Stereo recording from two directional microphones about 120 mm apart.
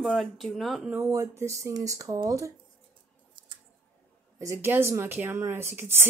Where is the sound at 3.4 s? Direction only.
40° right (ahead or behind).